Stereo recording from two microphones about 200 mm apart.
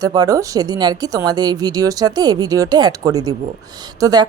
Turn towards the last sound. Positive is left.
turn(degrees=-20)  # may be behind; listen again after turning